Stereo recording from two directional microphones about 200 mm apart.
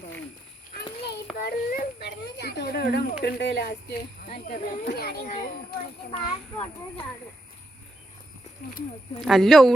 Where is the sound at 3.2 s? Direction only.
55° left (ahead or behind).